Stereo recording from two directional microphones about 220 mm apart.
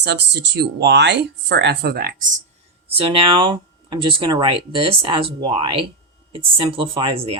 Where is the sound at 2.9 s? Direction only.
25° right (ahead or behind).